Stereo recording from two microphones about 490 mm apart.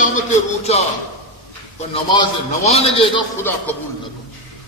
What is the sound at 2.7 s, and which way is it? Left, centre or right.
A man's voice, centre.